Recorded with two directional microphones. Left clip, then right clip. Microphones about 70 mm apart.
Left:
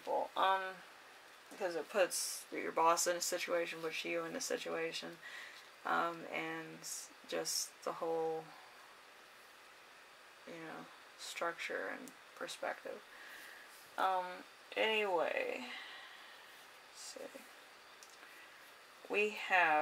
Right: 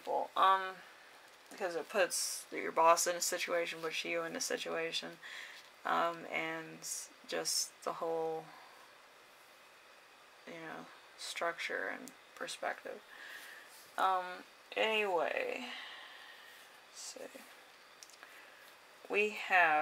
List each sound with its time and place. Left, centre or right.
0.1 s a sound: right
0.5 s speech: right
1.9 s speech: right
10.5 s speech: right
13.9 s speech: right
19.0 s speech: right